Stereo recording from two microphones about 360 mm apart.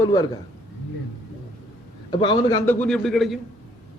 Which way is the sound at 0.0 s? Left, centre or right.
Centre.